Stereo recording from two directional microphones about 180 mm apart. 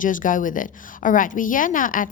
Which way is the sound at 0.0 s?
45° left (ahead or behind).